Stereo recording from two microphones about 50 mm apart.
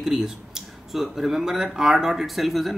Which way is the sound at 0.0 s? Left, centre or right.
Centre.